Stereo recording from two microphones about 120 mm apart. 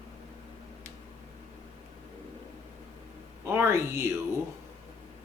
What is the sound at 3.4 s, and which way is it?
Speech, 20° right (ahead or behind).